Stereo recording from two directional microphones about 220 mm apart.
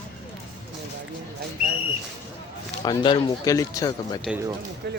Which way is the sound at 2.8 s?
20° left (ahead or behind).